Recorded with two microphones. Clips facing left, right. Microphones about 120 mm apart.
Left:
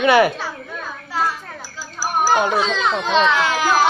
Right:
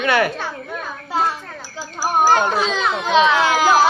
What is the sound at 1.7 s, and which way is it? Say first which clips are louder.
Children playing: right 3 dB; 25° right (ahead or behind).